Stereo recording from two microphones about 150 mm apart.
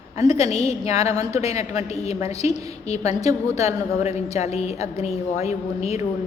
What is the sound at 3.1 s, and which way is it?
Speech, 20° right (ahead or behind).